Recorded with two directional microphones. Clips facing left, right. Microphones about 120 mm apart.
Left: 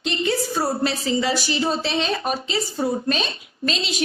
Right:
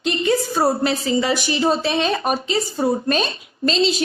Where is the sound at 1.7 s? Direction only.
50° right (ahead or behind).